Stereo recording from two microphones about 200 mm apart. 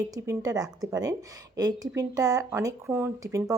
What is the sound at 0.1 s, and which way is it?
A woman's voice, 15° right (ahead or behind).